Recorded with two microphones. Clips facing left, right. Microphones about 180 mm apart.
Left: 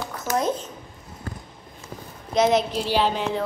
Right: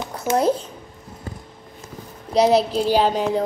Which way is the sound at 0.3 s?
30° right (ahead or behind).